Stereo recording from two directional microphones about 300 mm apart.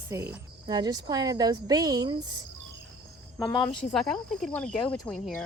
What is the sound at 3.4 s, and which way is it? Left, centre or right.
Speech, centre.